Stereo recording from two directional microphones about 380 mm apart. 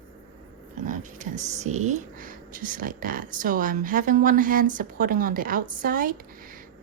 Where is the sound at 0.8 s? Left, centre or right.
Centre.